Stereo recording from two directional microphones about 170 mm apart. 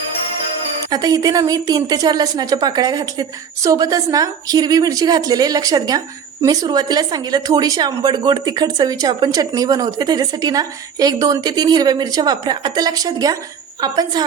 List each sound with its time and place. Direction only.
0.9 s a woman's voice: 20° right (ahead or behind)